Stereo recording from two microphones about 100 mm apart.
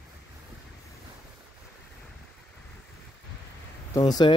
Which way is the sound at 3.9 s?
40° left (ahead or behind).